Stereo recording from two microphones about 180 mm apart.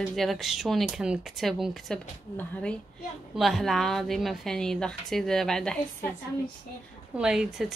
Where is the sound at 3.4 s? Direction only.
Centre (ahead or behind).